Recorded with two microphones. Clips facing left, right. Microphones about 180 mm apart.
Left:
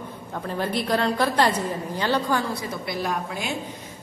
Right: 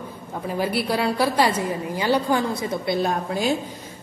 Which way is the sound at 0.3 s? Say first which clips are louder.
Right 2 dB; 10° right (ahead or behind).